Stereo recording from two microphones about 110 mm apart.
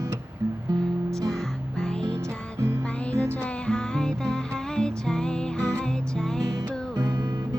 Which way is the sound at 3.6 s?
5° left (ahead or behind).